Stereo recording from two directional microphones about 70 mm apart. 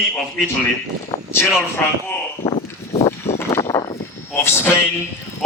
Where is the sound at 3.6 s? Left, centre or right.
Left.